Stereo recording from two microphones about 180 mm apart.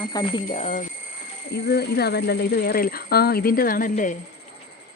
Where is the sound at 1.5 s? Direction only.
65° left (ahead or behind).